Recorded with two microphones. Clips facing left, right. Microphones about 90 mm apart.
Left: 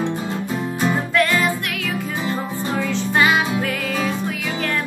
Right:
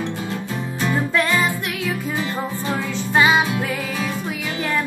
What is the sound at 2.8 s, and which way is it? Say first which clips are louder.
Music: even; 15° right (ahead or behind).